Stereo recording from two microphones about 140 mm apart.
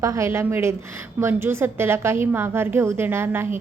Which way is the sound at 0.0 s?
20° right (ahead or behind).